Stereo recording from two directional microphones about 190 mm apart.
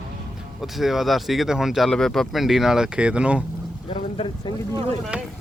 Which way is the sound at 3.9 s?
30° left (ahead or behind).